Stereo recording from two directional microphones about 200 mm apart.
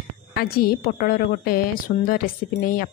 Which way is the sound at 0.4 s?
50° left (ahead or behind).